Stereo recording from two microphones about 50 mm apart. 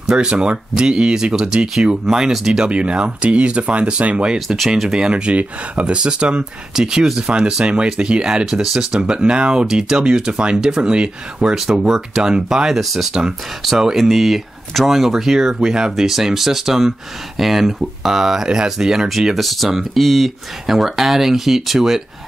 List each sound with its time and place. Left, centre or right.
0.0 s speech: centre
2.7 s speech: right
19.0 s speech: centre